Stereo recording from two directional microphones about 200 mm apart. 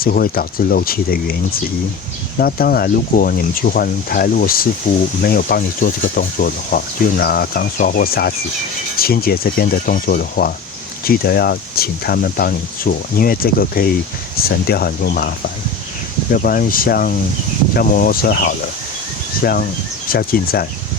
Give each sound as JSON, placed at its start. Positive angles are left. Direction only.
{"t": 0.0, "sound": "speech", "side_deg": 45}
{"t": 16.3, "sound": "speech", "side_deg": 45}